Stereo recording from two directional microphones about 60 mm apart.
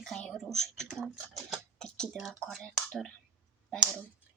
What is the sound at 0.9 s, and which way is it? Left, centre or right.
Speech, centre.